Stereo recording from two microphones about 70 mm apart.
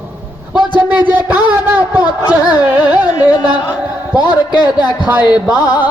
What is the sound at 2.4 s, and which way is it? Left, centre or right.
Carnatic music, left.